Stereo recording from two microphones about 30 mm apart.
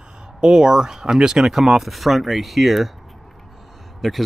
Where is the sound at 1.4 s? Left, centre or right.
Centre.